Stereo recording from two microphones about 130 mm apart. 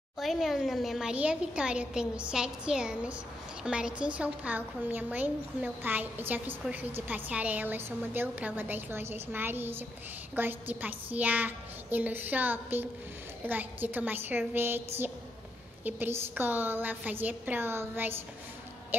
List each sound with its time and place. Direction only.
0.2 s a woman's voice: centre (ahead or behind); by 14.8 s 15° right (ahead or behind)
15.8 s a woman's voice: 15° right (ahead or behind)